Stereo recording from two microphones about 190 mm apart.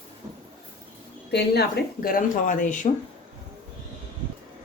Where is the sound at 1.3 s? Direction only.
55° left (ahead or behind).